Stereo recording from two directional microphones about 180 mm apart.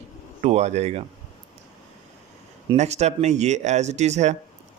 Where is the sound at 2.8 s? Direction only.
40° right (ahead or behind).